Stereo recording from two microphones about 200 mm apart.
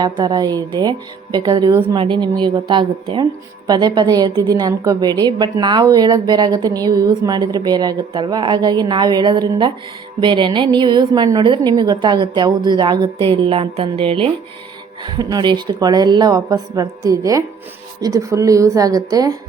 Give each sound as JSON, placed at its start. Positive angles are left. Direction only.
{"t": 0.0, "sound": "a woman's voice", "side_deg": -20}